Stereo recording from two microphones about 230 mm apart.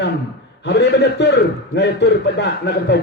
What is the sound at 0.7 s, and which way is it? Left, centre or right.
A man's voice, left.